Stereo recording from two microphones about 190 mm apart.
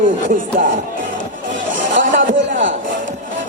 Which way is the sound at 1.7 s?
80° right.